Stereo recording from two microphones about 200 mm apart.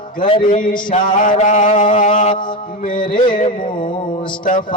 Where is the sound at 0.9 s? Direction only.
40° left (ahead or behind).